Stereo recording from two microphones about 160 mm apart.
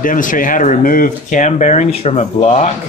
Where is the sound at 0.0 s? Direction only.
55° left (ahead or behind).